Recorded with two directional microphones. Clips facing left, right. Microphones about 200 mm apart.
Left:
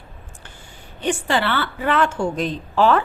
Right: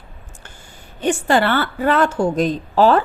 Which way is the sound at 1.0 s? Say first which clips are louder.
Right 4 dB; 45° right (ahead or behind).